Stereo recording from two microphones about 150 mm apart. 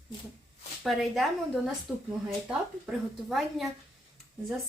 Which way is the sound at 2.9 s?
Centre (ahead or behind).